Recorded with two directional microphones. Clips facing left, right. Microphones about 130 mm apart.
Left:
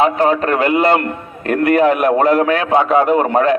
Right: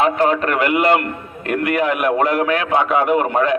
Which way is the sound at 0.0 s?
30° left (ahead or behind).